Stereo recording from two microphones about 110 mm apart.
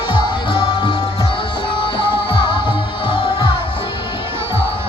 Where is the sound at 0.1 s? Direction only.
50° left (ahead or behind).